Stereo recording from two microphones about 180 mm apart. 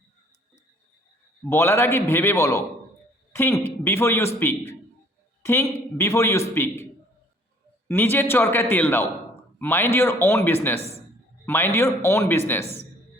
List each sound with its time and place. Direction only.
1.5 s a man's voice: 15° left (ahead or behind)
7.9 s a man's voice: 10° left (ahead or behind)
10.8 s speech: 35° right (ahead or behind)
11.4 s a man's voice: 15° left (ahead or behind)